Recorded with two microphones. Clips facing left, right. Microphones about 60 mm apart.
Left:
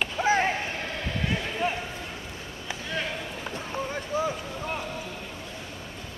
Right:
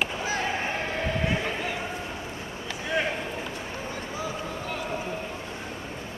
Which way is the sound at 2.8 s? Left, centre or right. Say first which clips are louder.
Right 5 dB; right.